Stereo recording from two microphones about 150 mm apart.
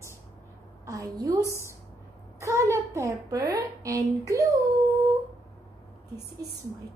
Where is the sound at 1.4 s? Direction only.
20° left (ahead or behind).